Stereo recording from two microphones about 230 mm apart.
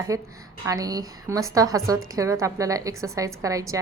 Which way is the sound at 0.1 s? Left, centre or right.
Centre.